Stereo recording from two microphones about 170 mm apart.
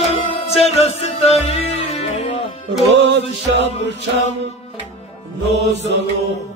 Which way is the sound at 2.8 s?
90° right.